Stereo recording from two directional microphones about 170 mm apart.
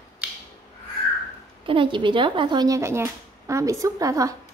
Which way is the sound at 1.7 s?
30° right (ahead or behind).